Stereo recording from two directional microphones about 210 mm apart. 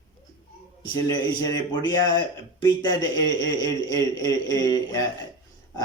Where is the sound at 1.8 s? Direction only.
20° left (ahead or behind).